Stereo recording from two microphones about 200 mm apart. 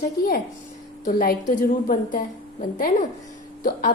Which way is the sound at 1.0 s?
40° left (ahead or behind).